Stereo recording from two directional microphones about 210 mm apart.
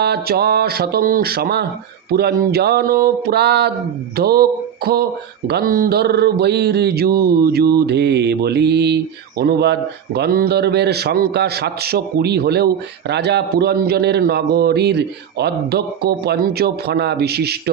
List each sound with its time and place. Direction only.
0.0 s a man's voice: 50° right (ahead or behind)